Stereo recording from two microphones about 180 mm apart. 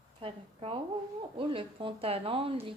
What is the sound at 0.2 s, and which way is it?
A woman's voice, 30° right (ahead or behind).